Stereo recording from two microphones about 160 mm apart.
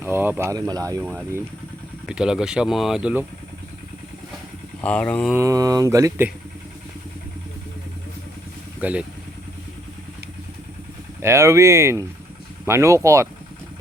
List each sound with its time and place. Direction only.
0.0 s speech: 10° right (ahead or behind)
2.0 s speech: 5° right (ahead or behind)
4.8 s speech: 5° left (ahead or behind)
5.3 s speech: 20° right (ahead or behind)
8.8 s speech: 10° right (ahead or behind)
11.2 s speech: 15° right (ahead or behind)